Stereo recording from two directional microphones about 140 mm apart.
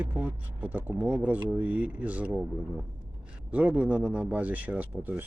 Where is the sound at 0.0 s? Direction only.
15° right (ahead or behind).